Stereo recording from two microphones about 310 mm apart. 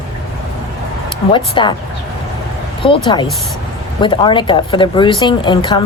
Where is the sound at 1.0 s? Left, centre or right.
Centre.